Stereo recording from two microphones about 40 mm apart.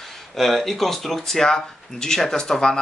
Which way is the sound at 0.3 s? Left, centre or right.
Centre.